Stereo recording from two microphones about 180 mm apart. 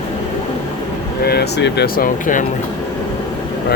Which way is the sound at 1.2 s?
60° left (ahead or behind).